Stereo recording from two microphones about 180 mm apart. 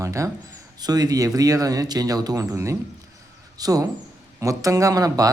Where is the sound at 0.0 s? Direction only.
15° right (ahead or behind).